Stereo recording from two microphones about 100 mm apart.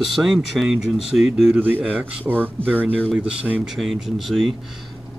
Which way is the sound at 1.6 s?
15° right (ahead or behind).